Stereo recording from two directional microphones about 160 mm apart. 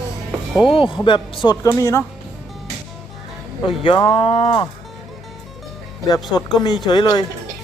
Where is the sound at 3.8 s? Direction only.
30° left (ahead or behind).